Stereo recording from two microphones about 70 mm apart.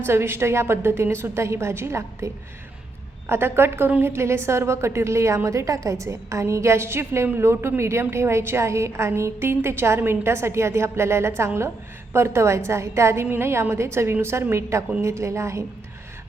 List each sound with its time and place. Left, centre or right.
0.0 s a woman's voice: right